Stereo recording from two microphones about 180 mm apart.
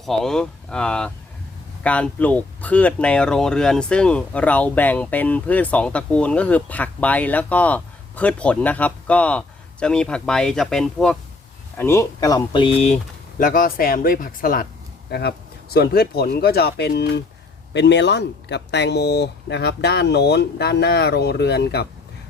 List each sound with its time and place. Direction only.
0.0 s speech: centre (ahead or behind)
11.8 s speech: 15° left (ahead or behind); by 13.0 s 35° left (ahead or behind)
13.4 s speech: 50° left (ahead or behind)
15.1 s speech: 65° left (ahead or behind)